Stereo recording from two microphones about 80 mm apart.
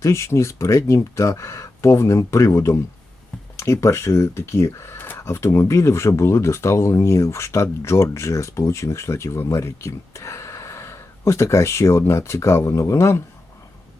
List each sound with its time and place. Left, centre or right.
0.0 s speech: left